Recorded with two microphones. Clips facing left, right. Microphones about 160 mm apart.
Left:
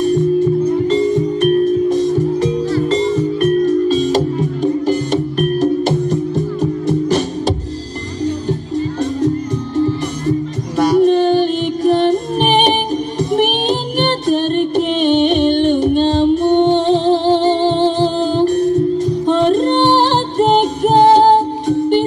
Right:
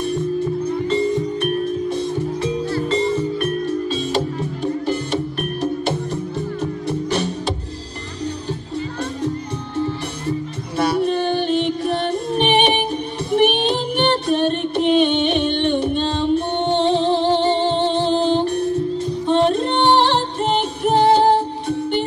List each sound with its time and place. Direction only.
0.8 s music: 40° left (ahead or behind)
10.8 s music: 40° left (ahead or behind)